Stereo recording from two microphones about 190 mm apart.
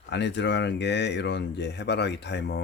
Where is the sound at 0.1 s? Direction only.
65° left (ahead or behind).